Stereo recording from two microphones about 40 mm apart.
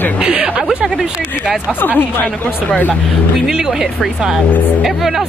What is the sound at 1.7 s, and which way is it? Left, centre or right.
Speech, left.